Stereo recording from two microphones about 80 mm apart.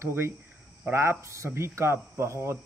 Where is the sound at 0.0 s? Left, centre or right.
Right.